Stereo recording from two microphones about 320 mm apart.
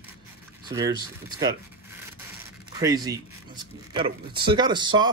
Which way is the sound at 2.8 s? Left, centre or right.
Centre.